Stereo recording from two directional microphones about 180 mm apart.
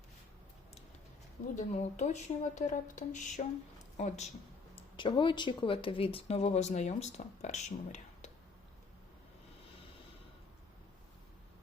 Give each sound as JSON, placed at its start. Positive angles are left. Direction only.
{"t": 1.5, "sound": "speech", "side_deg": 40}
{"t": 4.7, "sound": "speech", "side_deg": 30}